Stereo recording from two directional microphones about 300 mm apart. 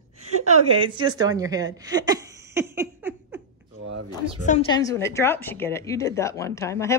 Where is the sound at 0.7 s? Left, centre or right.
Centre.